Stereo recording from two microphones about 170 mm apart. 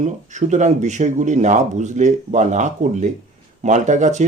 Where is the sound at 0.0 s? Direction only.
45° right (ahead or behind).